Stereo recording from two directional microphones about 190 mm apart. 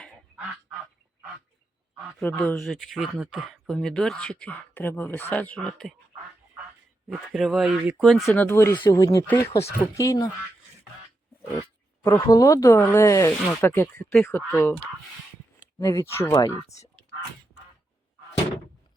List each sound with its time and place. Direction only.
2.0 s speech: 5° left (ahead or behind)
7.1 s speech: centre (ahead or behind); by 10.2 s 20° left (ahead or behind)
12.0 s speech: 15° left (ahead or behind)
15.8 s speech: 15° left (ahead or behind)
16.6 s speech: 35° left (ahead or behind)